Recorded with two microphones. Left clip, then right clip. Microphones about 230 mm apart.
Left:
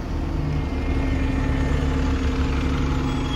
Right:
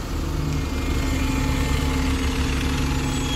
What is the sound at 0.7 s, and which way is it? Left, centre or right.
Vehicle, right.